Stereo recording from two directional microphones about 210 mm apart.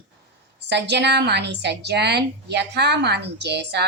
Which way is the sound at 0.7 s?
55° right (ahead or behind).